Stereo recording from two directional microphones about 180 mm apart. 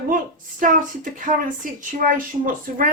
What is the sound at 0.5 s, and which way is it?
A woman's voice, 45° right (ahead or behind).